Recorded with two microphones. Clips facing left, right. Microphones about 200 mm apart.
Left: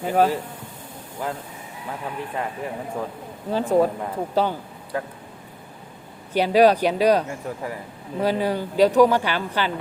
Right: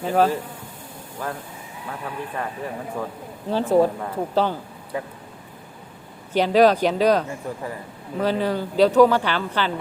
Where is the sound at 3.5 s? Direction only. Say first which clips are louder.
Right 1 dB; 10° left (ahead or behind).